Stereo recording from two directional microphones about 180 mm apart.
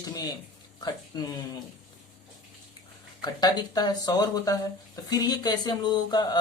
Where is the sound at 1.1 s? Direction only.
20° left (ahead or behind).